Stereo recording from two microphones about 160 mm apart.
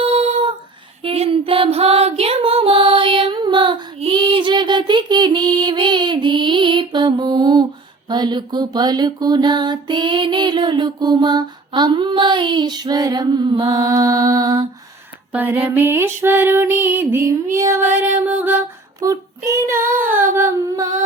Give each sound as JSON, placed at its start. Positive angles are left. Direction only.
{"t": 0.0, "sound": "humming", "side_deg": -35}
{"t": 1.0, "sound": "music", "side_deg": -35}
{"t": 8.1, "sound": "a sound", "side_deg": -25}
{"t": 15.3, "sound": "music", "side_deg": -10}
{"t": 18.9, "sound": "child singing", "side_deg": -20}
{"t": 19.5, "sound": "music", "side_deg": -20}